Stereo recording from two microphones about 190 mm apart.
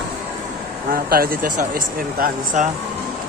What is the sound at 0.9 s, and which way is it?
Speech, 50° right (ahead or behind).